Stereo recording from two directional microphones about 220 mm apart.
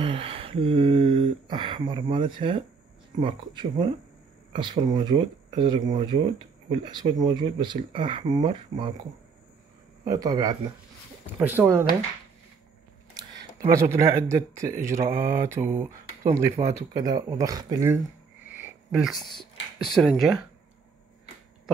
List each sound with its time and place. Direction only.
0.0 s speech: 25° right (ahead or behind)
10.0 s speech: 15° right (ahead or behind)
13.2 s a sound: 15° right (ahead or behind)
13.7 s speech: 10° right (ahead or behind)
18.6 s a sound: 5° right (ahead or behind)
19.8 s speech: centre (ahead or behind)